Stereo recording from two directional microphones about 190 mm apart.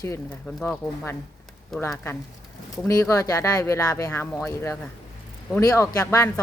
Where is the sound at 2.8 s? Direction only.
15° left (ahead or behind).